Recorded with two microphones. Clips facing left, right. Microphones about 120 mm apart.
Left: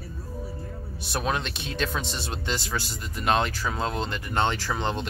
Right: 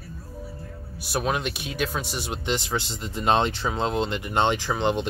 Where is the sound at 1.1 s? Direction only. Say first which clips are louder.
Right 2 dB; 10° right (ahead or behind).